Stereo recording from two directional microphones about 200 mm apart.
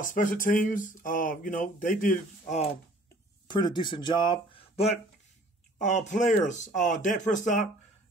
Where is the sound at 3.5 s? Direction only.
20° left (ahead or behind).